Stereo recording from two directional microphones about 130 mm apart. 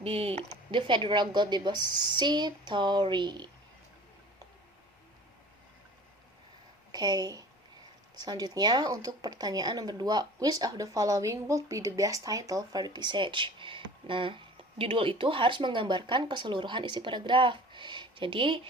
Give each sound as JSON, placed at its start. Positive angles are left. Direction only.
{"t": 0.0, "sound": "speech", "side_deg": -50}
{"t": 6.9, "sound": "speech", "side_deg": -30}